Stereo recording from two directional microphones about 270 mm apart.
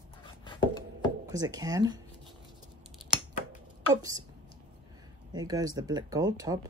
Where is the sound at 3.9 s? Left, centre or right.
Centre.